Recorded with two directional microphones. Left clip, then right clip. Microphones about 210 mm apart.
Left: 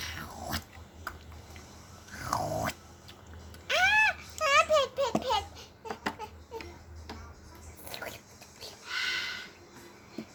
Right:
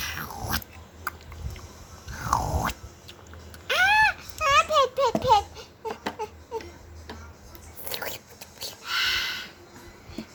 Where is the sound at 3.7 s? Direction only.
30° right (ahead or behind).